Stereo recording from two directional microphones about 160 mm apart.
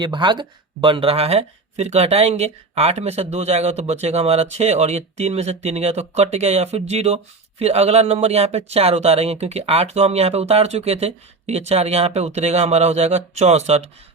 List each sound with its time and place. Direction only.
0.0 s speech: 30° right (ahead or behind)